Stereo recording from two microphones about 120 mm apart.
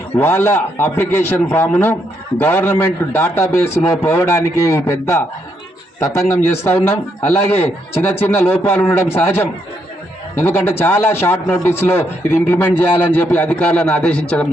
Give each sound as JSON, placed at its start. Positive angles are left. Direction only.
{"t": 0.2, "sound": "a man's voice", "side_deg": 20}